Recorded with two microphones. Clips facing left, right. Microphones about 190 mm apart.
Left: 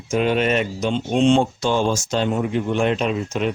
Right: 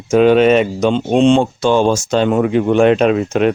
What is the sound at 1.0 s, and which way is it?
Speech, 75° right (ahead or behind).